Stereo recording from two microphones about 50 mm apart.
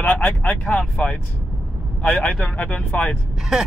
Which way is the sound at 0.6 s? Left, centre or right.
Left.